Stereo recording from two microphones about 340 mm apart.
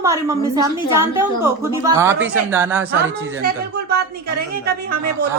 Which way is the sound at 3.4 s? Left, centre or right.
Right.